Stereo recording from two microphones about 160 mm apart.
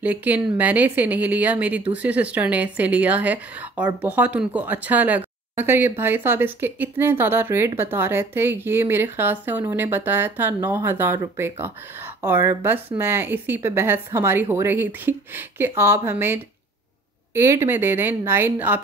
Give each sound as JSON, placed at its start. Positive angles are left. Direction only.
{"t": 0.0, "sound": "speech", "side_deg": -10}